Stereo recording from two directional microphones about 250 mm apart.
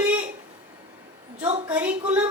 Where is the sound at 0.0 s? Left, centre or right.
Centre.